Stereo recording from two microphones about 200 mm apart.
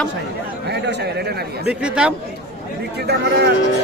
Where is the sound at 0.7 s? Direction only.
55° right (ahead or behind).